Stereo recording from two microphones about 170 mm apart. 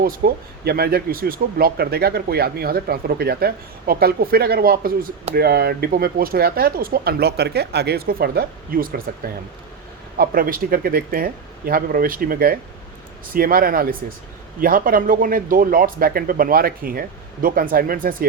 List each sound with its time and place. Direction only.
0.0 s speech: 65° right (ahead or behind)
10.2 s speech: 60° right (ahead or behind)